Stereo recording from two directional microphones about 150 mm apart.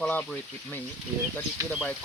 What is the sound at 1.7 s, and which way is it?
Speech, 10° left (ahead or behind).